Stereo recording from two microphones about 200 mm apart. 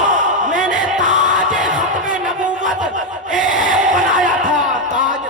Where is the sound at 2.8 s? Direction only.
40° right (ahead or behind).